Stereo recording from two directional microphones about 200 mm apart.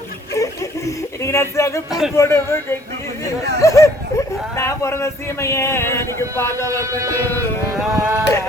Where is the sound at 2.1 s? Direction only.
15° left (ahead or behind).